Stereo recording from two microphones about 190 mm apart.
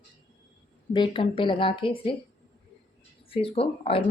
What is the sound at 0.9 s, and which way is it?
Speech, 25° left (ahead or behind).